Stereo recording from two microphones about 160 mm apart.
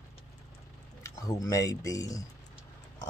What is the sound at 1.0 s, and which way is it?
Speech, 20° left (ahead or behind).